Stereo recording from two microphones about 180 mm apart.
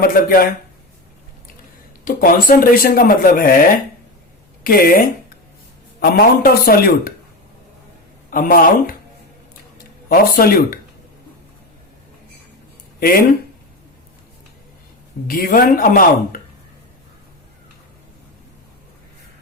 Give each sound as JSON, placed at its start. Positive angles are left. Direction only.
{"t": 0.0, "sound": "speech", "side_deg": 50}
{"t": 2.0, "sound": "speech", "side_deg": 50}
{"t": 8.3, "sound": "speech", "side_deg": 50}
{"t": 10.1, "sound": "speech", "side_deg": 55}
{"t": 13.0, "sound": "speech", "side_deg": 55}
{"t": 15.3, "sound": "speech", "side_deg": 55}